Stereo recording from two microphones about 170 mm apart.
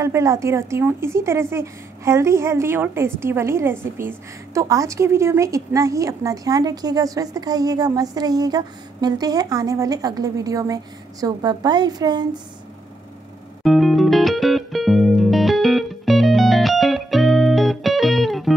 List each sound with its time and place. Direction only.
0.0 s a woman's voice: 15° right (ahead or behind)
13.7 s music: centre (ahead or behind)